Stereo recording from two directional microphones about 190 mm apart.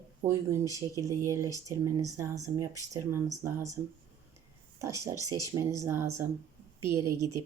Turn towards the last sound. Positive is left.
turn(degrees=-15)  # may be behind; listen again after turning